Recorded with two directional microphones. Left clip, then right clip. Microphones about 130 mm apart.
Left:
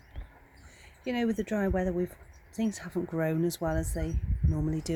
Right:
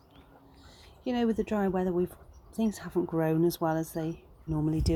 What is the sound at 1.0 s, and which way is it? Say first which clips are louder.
Speech: right 2 dB; 20° left (ahead or behind).